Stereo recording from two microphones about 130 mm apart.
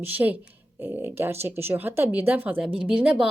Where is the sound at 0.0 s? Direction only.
15° right (ahead or behind).